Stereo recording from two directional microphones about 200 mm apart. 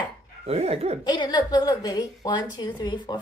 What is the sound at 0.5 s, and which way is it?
Speech, 30° right (ahead or behind).